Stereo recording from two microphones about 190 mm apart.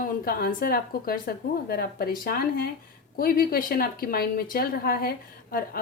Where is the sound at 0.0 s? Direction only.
50° left (ahead or behind).